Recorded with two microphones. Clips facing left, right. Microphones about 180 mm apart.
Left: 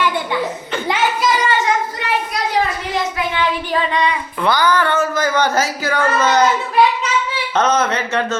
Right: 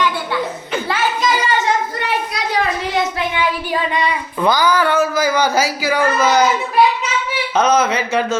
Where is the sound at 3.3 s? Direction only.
10° right (ahead or behind).